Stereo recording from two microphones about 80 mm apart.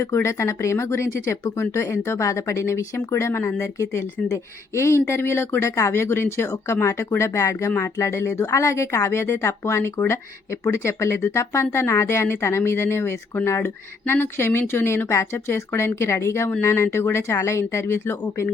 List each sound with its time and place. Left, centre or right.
0.0 s speech: left